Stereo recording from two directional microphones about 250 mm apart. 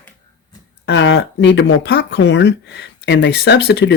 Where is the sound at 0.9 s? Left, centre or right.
Left.